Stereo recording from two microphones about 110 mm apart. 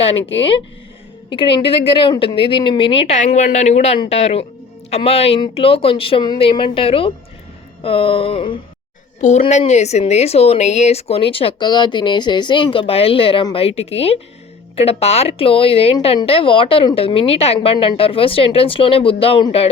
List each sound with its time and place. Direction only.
0.0 s a woman's voice: 60° left (ahead or behind)
9.5 s a woman's voice: 90° left; by 19.7 s 60° left (ahead or behind)